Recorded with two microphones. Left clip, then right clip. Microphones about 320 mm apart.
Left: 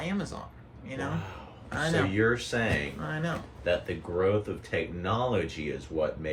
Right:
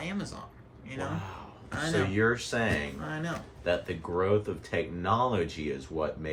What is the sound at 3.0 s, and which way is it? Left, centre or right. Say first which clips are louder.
Speech: left 2 dB; centre.